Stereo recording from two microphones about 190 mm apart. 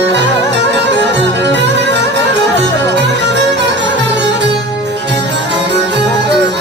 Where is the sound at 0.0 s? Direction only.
65° right (ahead or behind).